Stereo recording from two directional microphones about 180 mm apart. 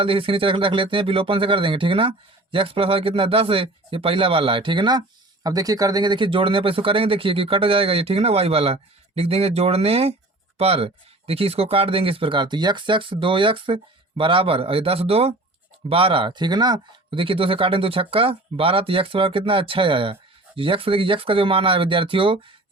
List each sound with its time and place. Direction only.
0.0 s speech: 30° right (ahead or behind)